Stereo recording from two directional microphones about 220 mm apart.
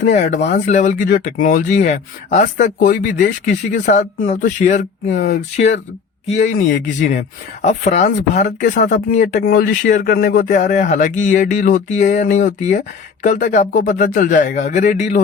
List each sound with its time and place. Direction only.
0.0 s speech: 35° left (ahead or behind)
6.2 s speech: 35° left (ahead or behind)